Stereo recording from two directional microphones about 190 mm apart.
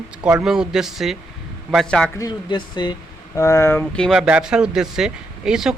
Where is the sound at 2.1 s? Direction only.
20° left (ahead or behind); by 5.7 s 5° right (ahead or behind).